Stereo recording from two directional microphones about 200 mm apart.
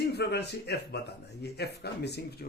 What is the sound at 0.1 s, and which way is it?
Speech, 55° left (ahead or behind).